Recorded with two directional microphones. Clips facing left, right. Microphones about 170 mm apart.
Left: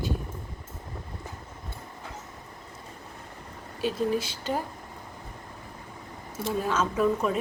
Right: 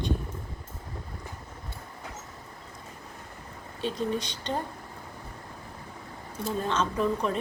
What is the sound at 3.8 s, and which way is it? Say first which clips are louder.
Speech: left 3 dB; 5° left (ahead or behind).